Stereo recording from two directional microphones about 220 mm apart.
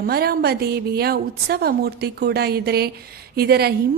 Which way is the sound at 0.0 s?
45° right (ahead or behind).